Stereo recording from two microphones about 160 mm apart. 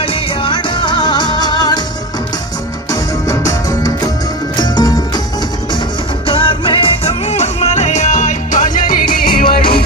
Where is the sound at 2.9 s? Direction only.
20° left (ahead or behind).